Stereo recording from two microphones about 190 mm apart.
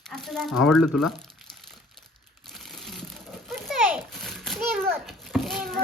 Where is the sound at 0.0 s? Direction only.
Centre (ahead or behind).